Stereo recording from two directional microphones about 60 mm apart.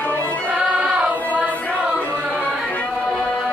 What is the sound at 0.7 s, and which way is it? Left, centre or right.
Choir, right.